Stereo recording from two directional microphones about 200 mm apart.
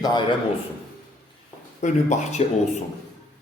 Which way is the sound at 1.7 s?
35° left (ahead or behind).